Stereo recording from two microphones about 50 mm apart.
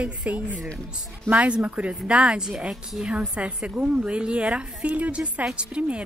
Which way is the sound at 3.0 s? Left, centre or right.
Right.